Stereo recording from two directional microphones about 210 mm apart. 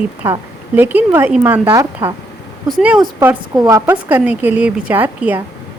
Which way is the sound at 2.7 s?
5° right (ahead or behind).